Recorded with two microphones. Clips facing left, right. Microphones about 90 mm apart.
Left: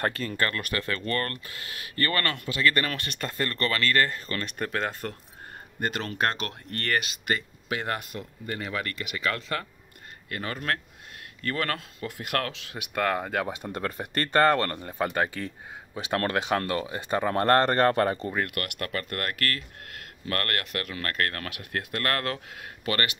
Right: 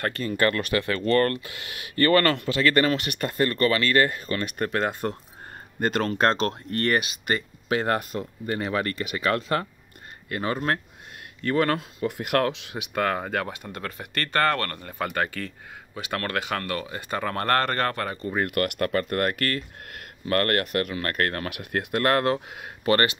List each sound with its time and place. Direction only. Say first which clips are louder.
0.3 s speech: right 6 dB; 15° right (ahead or behind)
2.0 s speech: right 9 dB; 30° right (ahead or behind); by 4.9 s 5° right (ahead or behind)
5.8 s speech: right 5 dB; 40° right (ahead or behind); by 7.2 s 20° right (ahead or behind)
7.2 s speech: right 3 dB; 35° right (ahead or behind)
12.7 s speech: left 3 dB; centre (ahead or behind)
13.7 s speech: left 2 dB; 35° left (ahead or behind)
18.5 s speech: right 8 dB; 35° right (ahead or behind)